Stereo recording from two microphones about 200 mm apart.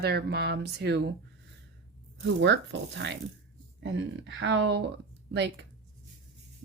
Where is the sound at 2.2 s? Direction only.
60° right (ahead or behind).